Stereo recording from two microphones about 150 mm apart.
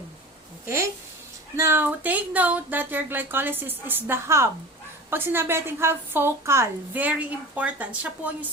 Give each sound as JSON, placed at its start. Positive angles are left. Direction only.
{"t": 0.6, "sound": "a woman's voice", "side_deg": -20}